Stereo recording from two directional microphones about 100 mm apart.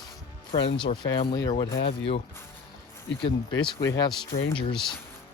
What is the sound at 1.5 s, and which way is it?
Speech, 50° left (ahead or behind).